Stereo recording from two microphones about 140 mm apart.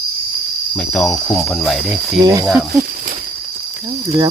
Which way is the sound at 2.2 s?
30° right (ahead or behind).